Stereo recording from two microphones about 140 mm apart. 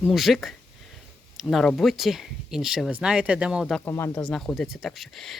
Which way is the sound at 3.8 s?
15° left (ahead or behind).